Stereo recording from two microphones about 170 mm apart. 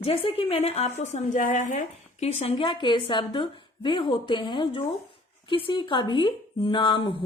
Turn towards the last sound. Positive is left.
turn(degrees=30)  # may be behind; listen again after turning